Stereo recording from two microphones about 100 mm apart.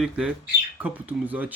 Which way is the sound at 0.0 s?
10° right (ahead or behind).